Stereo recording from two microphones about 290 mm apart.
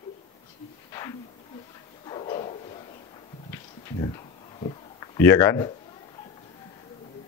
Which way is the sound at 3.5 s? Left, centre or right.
Centre.